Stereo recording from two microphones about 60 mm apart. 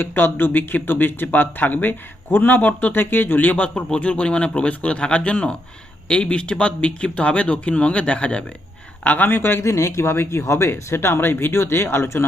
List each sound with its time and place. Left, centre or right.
0.0 s speech: left; by 8.4 s centre
9.0 s speech: left
9.6 s speech: left